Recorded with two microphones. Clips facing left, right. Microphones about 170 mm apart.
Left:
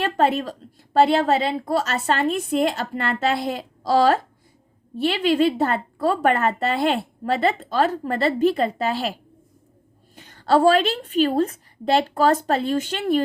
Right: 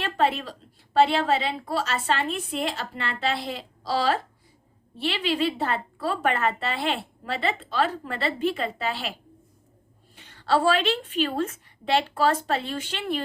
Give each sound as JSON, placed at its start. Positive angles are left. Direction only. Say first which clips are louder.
{"t": 0.0, "sound": "a woman's voice", "louder": "left 4 dB", "side_deg": 45}
{"t": 10.2, "sound": "speech", "louder": "left 5 dB", "side_deg": 40}